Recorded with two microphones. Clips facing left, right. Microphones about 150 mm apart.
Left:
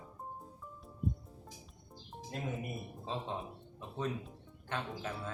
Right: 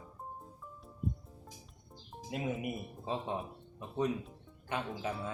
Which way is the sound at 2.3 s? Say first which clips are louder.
Right 4 dB; 10° right (ahead or behind).